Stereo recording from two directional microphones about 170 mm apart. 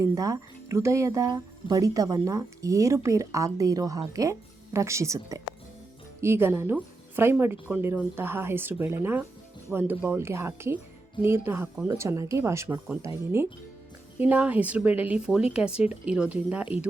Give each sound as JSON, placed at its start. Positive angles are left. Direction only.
{"t": 0.0, "sound": "a woman's voice", "side_deg": -20}